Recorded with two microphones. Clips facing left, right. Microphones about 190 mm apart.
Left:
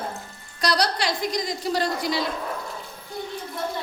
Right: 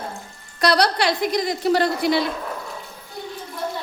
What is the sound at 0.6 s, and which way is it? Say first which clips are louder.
A woman's voice: right 5 dB; 60° right (ahead or behind).